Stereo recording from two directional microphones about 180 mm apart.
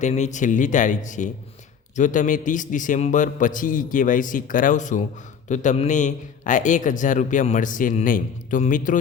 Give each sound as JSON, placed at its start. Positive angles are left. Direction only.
{"t": 0.0, "sound": "a man's voice", "side_deg": 40}